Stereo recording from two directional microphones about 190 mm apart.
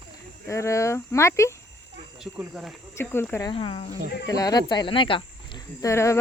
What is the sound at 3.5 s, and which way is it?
Speech, 30° left (ahead or behind).